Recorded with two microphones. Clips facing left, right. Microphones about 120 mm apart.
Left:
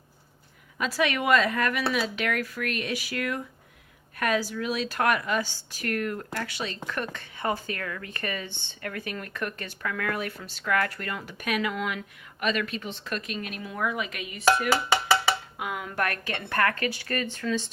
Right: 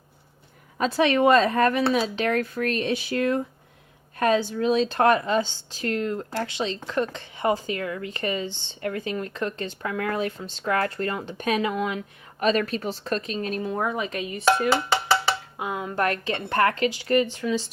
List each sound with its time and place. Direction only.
0.8 s speech: 30° right (ahead or behind)
12.4 s speech: 35° right (ahead or behind)
15.5 s speech: 25° right (ahead or behind)